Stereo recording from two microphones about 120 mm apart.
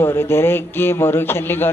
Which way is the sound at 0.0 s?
20° left (ahead or behind).